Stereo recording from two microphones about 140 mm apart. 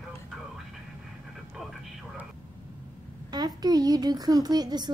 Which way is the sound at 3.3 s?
30° right (ahead or behind).